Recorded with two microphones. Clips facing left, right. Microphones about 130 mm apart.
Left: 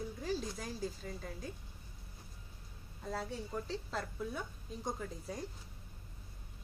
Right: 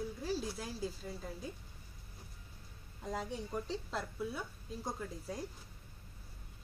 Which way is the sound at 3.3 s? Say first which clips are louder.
Right 1 dB; 10° right (ahead or behind).